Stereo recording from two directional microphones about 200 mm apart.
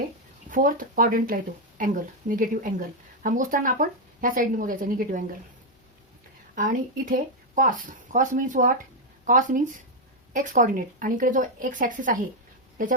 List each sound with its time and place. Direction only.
0.5 s speech: 45° right (ahead or behind)
6.6 s speech: 40° right (ahead or behind)